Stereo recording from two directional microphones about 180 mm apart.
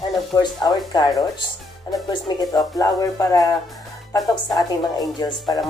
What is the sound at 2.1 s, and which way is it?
Speech, 20° left (ahead or behind).